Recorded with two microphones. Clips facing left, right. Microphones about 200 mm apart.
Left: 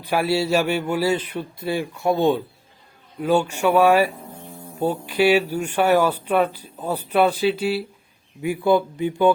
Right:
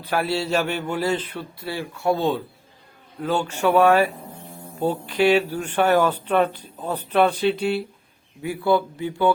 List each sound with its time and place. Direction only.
0.0 s speech: 10° left (ahead or behind)
8.4 s speech: 15° left (ahead or behind)